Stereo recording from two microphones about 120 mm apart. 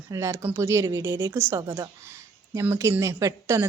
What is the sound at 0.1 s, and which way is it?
A woman's voice, 25° right (ahead or behind).